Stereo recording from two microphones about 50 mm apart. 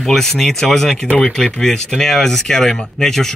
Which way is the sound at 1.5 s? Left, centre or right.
Centre.